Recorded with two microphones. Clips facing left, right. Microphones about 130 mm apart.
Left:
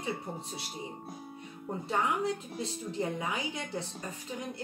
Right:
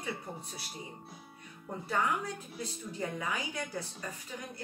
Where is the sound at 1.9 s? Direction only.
25° left (ahead or behind).